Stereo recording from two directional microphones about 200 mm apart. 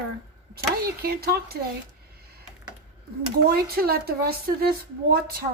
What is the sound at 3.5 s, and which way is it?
Speech, 50° right (ahead or behind).